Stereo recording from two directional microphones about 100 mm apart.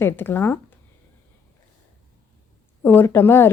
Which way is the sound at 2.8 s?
20° left (ahead or behind).